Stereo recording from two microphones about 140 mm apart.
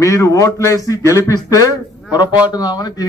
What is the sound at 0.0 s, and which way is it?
Speech, 25° left (ahead or behind).